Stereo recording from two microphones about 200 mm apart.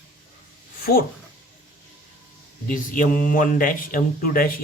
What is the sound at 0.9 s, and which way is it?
Speech, 45° left (ahead or behind).